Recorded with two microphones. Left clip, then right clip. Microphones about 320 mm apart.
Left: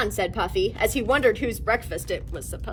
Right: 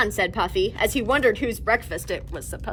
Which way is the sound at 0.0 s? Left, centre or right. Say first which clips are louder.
Right 3 dB; centre.